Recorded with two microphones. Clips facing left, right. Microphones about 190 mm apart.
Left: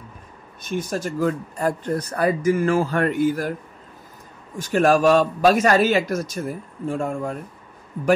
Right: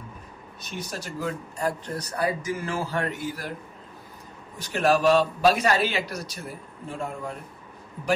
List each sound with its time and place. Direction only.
0.6 s speech: 50° left (ahead or behind)
4.6 s speech: 45° left (ahead or behind)